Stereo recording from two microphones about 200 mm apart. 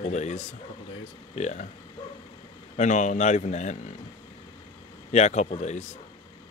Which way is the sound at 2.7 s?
35° left (ahead or behind).